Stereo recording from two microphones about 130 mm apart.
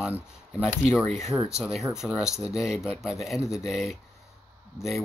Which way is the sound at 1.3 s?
15° right (ahead or behind).